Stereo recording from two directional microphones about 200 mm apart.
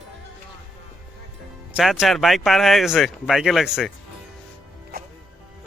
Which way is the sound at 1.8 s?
Centre (ahead or behind).